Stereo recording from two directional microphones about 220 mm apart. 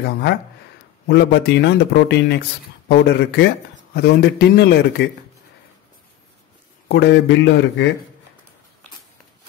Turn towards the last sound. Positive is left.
turn(degrees=55)  # may be behind; listen again after turning